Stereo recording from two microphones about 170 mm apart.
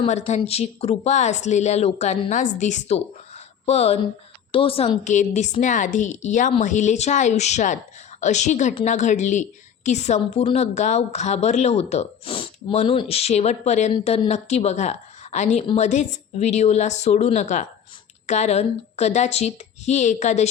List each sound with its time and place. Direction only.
0.0 s a woman's voice: 40° left (ahead or behind)